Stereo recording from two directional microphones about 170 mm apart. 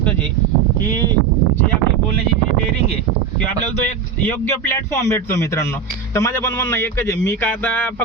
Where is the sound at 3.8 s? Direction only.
10° left (ahead or behind).